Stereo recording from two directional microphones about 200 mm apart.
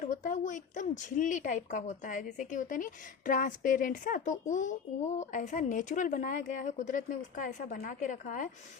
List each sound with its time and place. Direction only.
0.0 s a woman's voice: 40° left (ahead or behind)